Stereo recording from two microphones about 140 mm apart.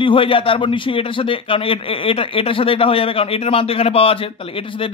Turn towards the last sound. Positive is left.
turn(degrees=40)  # may be behind; listen again after turning